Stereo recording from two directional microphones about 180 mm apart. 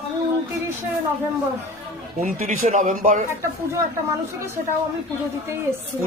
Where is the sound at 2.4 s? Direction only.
45° right (ahead or behind).